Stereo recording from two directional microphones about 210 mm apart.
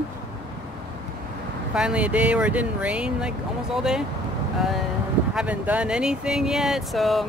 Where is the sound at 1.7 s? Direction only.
5° right (ahead or behind).